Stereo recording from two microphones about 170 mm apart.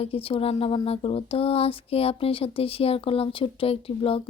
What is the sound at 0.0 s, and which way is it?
Speech, 35° left (ahead or behind).